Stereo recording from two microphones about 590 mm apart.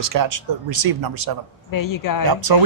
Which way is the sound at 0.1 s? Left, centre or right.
Right.